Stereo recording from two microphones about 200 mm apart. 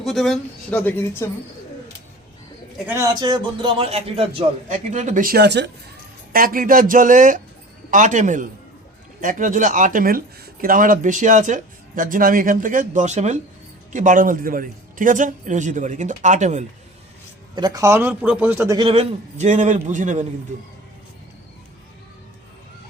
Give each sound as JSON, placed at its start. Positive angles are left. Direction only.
{"t": 0.0, "sound": "speech", "side_deg": 0}
{"t": 2.7, "sound": "speech", "side_deg": -10}
{"t": 6.3, "sound": "speech", "side_deg": -45}
{"t": 17.5, "sound": "a man's voice", "side_deg": -20}